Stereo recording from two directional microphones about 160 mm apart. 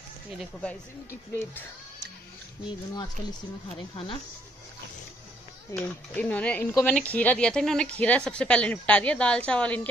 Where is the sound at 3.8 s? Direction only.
35° left (ahead or behind).